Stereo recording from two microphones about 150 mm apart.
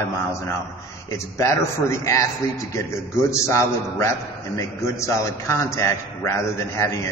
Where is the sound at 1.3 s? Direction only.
20° left (ahead or behind).